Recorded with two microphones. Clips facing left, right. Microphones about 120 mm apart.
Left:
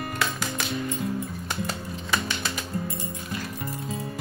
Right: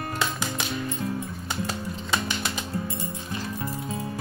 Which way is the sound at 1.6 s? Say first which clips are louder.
Right 1 dB; 15° right (ahead or behind).